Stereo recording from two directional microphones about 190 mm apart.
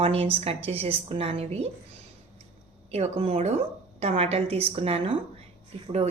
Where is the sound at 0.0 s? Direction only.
30° right (ahead or behind).